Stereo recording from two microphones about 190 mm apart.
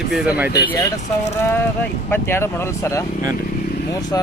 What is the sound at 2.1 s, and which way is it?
Speech, 15° left (ahead or behind).